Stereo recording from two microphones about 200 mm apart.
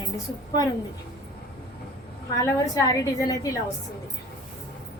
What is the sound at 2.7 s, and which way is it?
Speech, 15° left (ahead or behind).